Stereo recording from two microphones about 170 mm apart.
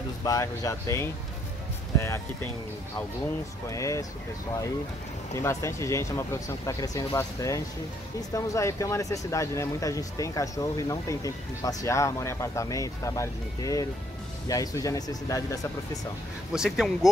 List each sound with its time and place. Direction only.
0.2 s speech: 20° left (ahead or behind)
3.7 s speech: 20° left (ahead or behind)
5.3 s speech: 15° left (ahead or behind)
16.5 s speech: 5° right (ahead or behind)